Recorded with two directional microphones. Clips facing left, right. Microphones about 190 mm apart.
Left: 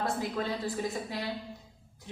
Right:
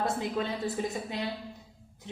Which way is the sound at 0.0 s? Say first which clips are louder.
Right 2 dB; 20° right (ahead or behind).